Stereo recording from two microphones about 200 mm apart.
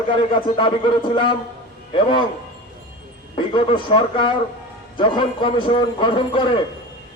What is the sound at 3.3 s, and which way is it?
A man's voice, 25° left (ahead or behind).